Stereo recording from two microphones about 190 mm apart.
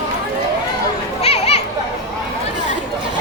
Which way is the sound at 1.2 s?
30° left (ahead or behind).